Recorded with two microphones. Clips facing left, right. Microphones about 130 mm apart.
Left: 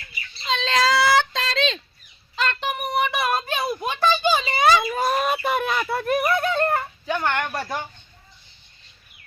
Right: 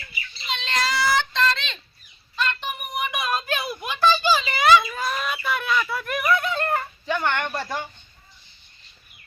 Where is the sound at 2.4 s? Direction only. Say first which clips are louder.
Left 4 dB; 40° left (ahead or behind).